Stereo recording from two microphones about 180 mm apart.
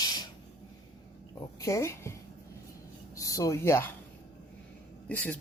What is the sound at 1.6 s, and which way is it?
Speech, 15° left (ahead or behind).